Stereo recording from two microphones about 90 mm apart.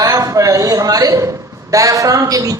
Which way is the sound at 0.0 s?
40° right (ahead or behind).